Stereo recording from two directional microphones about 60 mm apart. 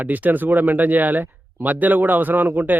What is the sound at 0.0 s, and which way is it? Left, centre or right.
Speech, right.